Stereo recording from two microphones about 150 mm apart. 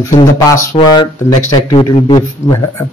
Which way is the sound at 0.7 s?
30° left (ahead or behind).